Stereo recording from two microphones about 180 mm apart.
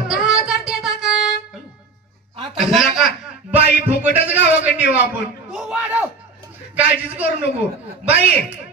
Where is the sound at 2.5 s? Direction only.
Centre (ahead or behind).